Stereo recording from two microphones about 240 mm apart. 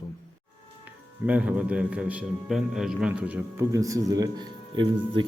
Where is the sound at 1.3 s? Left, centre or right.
Centre.